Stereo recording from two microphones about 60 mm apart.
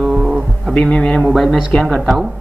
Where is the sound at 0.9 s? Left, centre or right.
Centre.